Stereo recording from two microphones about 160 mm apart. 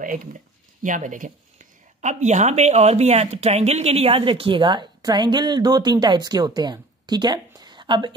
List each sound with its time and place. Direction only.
0.0 s speech: 55° right (ahead or behind); by 8.1 s 30° right (ahead or behind)